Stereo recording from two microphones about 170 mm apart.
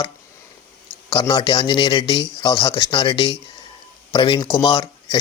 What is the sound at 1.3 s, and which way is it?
Speech, 30° left (ahead or behind).